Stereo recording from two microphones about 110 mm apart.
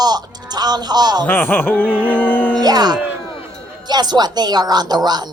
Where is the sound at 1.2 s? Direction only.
20° left (ahead or behind).